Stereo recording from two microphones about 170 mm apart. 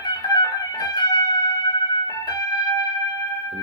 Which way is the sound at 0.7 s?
20° left (ahead or behind).